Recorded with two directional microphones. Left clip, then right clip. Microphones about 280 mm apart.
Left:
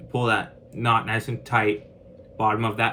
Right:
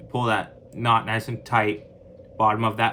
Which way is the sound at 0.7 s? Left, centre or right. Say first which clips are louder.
Right 1 dB; right.